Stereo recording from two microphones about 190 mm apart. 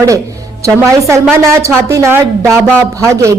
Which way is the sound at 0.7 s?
15° right (ahead or behind).